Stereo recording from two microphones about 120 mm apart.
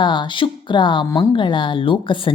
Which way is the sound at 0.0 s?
40° left (ahead or behind).